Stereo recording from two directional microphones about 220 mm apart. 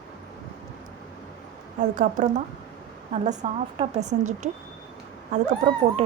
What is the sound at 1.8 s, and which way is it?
Speech, 35° right (ahead or behind).